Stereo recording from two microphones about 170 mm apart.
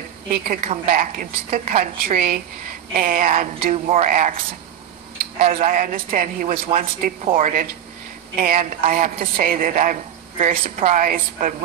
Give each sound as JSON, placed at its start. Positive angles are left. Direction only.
{"t": 0.3, "sound": "a man's voice", "side_deg": -50}
{"t": 5.6, "sound": "a man's voice", "side_deg": -50}
{"t": 10.8, "sound": "a woman's voice", "side_deg": -40}
{"t": 11.1, "sound": "a man's voice", "side_deg": -50}